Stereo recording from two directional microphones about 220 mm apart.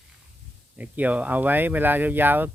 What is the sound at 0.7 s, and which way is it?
Speech, 5° right (ahead or behind).